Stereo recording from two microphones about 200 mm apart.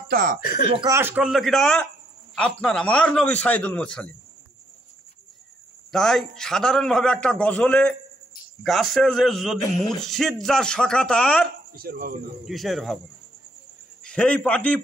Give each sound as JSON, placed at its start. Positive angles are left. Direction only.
{"t": 0.1, "sound": "speech", "side_deg": -45}
{"t": 0.7, "sound": "a man's voice", "side_deg": -15}
{"t": 5.9, "sound": "a man's voice", "side_deg": 0}
{"t": 11.7, "sound": "speech", "side_deg": -50}
{"t": 12.4, "sound": "a man's voice", "side_deg": 0}
{"t": 14.0, "sound": "a man's voice", "side_deg": 5}